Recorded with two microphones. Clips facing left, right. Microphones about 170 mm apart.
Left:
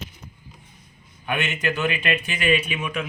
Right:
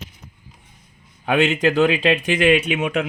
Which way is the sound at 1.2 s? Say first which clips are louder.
Right 8 dB; 90° right.